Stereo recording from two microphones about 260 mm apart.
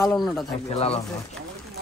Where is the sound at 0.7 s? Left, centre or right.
Left.